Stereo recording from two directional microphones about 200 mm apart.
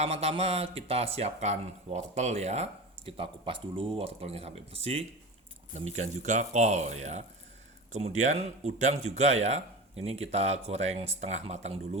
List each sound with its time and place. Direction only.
0.0 s speech: 30° right (ahead or behind)